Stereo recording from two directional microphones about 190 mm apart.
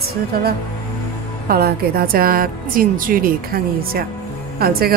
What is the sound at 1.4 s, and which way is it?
A woman's voice, 50° right (ahead or behind).